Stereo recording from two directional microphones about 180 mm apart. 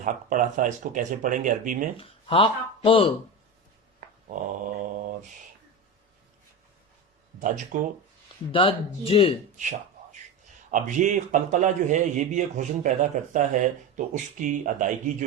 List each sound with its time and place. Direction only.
0.0 s a man's voice: 45° right (ahead or behind)
2.0 s speech: 30° left (ahead or behind)
4.3 s mantra: 45° right (ahead or behind)
7.3 s speech: 45° right (ahead or behind)
8.5 s speech: 30° left (ahead or behind)
9.6 s a sound: 45° right (ahead or behind)
10.7 s a man's voice: 45° right (ahead or behind)